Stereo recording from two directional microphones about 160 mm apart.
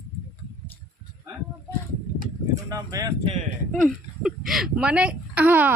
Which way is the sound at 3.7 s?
Centre (ahead or behind).